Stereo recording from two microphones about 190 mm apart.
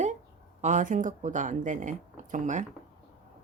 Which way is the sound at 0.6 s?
40° right (ahead or behind).